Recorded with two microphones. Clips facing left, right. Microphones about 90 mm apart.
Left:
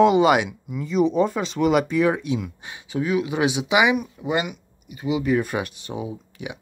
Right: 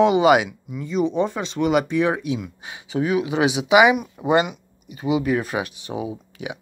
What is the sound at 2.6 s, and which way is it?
Speech, 20° right (ahead or behind).